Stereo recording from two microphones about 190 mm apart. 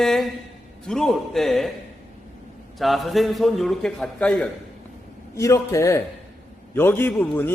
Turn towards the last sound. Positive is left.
turn(degrees=10)  # may be behind; listen again after turning